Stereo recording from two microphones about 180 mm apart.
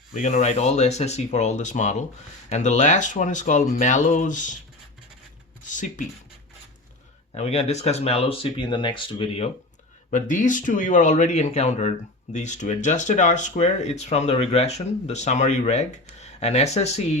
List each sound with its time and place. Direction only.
0.1 s speech: 45° left (ahead or behind)
5.6 s speech: 45° left (ahead or behind)
7.3 s speech: 35° left (ahead or behind)
10.1 s speech: 45° left (ahead or behind)